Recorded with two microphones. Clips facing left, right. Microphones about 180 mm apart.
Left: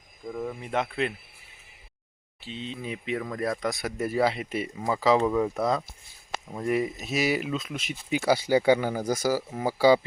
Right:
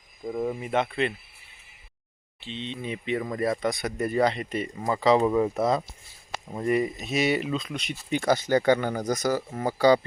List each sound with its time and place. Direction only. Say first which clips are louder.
0.3 s speech: right 4 dB; 20° right (ahead or behind)
0.6 s speech: even; centre (ahead or behind)
2.4 s speech: right 1 dB; 5° left (ahead or behind)